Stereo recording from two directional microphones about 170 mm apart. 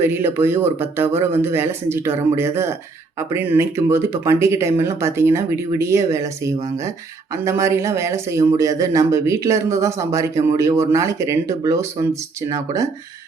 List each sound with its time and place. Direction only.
0.0 s speech: 15° right (ahead or behind)